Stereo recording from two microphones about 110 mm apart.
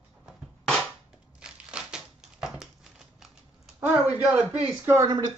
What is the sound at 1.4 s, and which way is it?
Crumpling, 10° right (ahead or behind).